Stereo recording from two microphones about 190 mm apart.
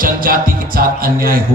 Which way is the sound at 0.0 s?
50° right (ahead or behind).